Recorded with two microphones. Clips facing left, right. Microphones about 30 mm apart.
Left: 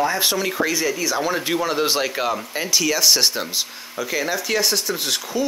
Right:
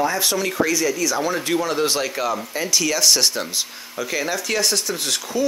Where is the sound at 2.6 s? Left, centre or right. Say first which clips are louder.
Left 1 dB; centre.